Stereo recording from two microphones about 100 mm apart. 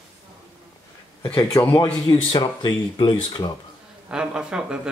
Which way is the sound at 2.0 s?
45° left (ahead or behind).